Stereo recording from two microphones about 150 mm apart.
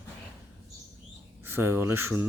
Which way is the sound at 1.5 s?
15° right (ahead or behind).